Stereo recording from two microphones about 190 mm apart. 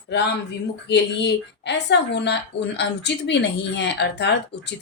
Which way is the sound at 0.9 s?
65° left (ahead or behind).